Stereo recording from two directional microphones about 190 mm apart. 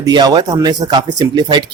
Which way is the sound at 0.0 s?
20° right (ahead or behind).